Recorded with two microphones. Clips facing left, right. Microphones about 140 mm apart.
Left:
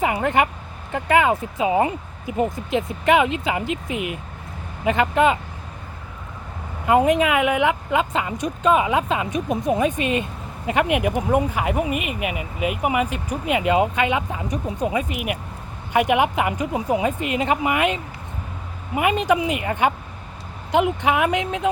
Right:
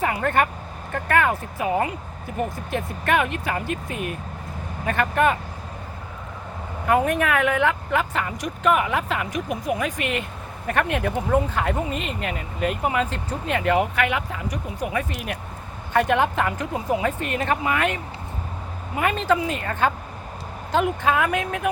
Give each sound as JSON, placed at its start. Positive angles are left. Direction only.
{"t": 0.0, "sound": "speech", "side_deg": 15}
{"t": 6.8, "sound": "speech", "side_deg": 15}